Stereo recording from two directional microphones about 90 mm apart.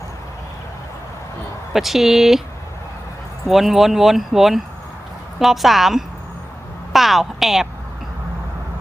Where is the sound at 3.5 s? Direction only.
Centre (ahead or behind).